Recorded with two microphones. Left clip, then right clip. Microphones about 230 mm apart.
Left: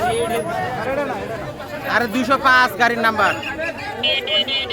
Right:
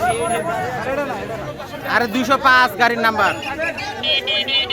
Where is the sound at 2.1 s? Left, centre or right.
Centre.